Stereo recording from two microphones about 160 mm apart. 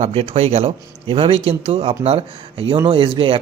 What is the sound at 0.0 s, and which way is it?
Speech, 40° right (ahead or behind).